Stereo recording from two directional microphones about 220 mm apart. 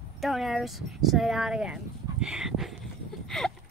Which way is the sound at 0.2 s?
Centre (ahead or behind).